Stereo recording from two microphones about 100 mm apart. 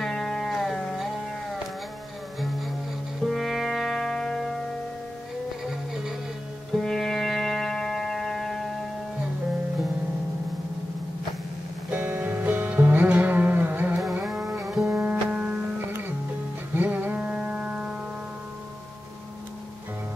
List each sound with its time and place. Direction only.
0.0 s music: 5° left (ahead or behind)
3.3 s music: centre (ahead or behind)
6.7 s music: 5° left (ahead or behind)
11.9 s music: 15° right (ahead or behind)
14.2 s music: 5° right (ahead or behind)